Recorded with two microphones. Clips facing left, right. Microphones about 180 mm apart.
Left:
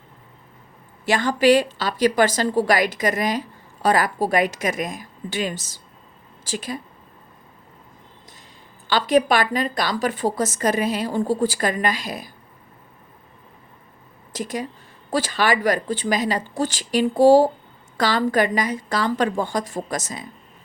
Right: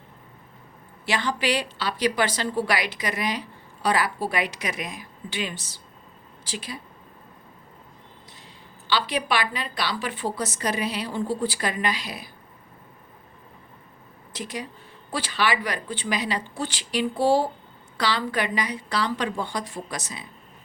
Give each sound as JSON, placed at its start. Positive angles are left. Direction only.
{"t": 1.0, "sound": "a woman's voice", "side_deg": 45}
{"t": 8.9, "sound": "a woman's voice", "side_deg": 45}
{"t": 14.3, "sound": "a woman's voice", "side_deg": 45}